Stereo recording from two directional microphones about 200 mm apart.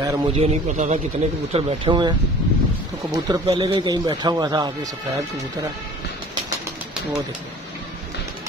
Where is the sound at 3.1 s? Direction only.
20° right (ahead or behind).